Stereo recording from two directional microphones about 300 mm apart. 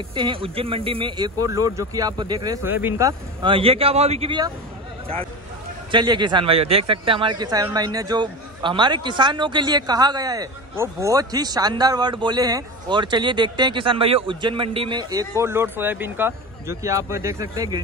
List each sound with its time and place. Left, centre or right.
0.1 s a man's voice: centre
5.9 s a man's voice: centre